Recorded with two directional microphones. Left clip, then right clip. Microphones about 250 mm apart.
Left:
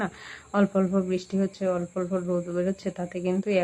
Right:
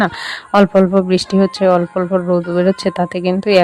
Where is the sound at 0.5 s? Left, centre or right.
Right.